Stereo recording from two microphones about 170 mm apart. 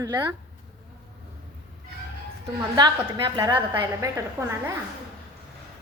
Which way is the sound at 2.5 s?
25° right (ahead or behind).